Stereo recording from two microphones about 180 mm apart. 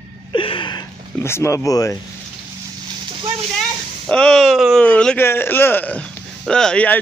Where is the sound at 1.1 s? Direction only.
15° left (ahead or behind).